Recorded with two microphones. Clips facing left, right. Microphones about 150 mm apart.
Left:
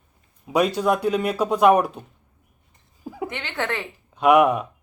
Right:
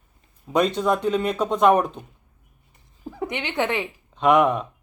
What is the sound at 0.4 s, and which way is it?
A man's voice, 10° left (ahead or behind).